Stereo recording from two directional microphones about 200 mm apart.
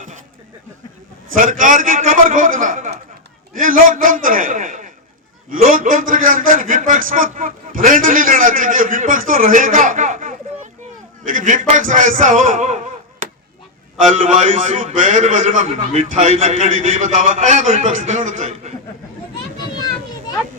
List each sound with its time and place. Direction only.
1.4 s a man's voice: 40° right (ahead or behind)
14.1 s a man's voice: 40° right (ahead or behind)